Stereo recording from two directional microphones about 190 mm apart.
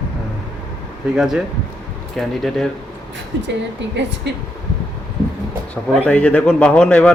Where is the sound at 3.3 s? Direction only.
75° right (ahead or behind).